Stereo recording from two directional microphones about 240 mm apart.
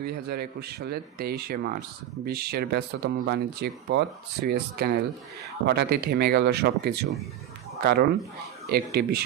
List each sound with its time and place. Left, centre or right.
0.0 s speech: right